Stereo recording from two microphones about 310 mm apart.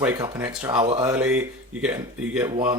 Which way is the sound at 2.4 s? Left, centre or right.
Centre.